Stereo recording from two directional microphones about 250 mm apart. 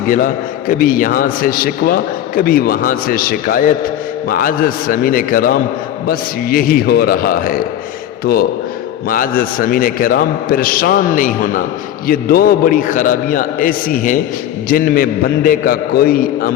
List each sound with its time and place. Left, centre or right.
0.7 s a man's voice: left